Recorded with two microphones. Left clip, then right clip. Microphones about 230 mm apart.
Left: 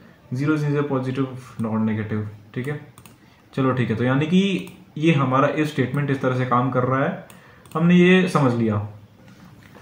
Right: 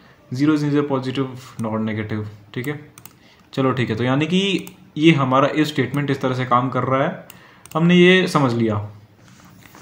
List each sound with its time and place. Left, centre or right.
0.3 s speech: right